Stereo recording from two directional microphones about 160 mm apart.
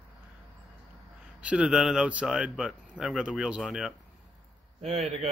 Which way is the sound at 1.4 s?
5° right (ahead or behind).